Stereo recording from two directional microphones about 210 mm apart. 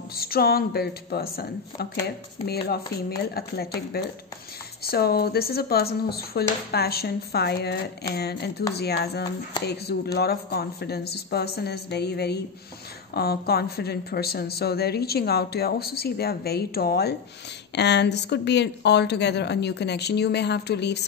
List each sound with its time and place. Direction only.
0.2 s speech: 45° left (ahead or behind)